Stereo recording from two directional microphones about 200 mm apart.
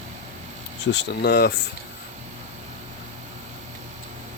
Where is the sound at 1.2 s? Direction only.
55° left (ahead or behind).